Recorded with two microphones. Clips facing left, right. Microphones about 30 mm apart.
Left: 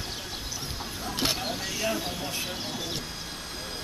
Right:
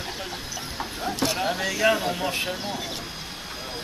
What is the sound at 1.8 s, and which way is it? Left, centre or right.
Speech, right.